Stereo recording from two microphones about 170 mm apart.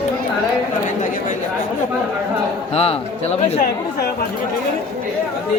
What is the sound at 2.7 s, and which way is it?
Speech, 35° left (ahead or behind).